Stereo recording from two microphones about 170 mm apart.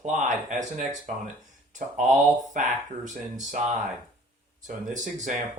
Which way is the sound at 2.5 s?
50° right (ahead or behind).